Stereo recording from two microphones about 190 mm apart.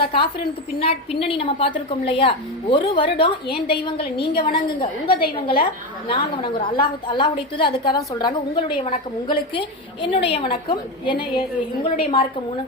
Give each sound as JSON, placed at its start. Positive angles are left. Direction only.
{"t": 0.8, "sound": "a woman's voice", "side_deg": 30}